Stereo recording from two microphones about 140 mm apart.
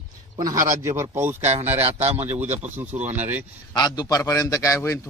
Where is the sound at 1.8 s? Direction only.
50° right (ahead or behind).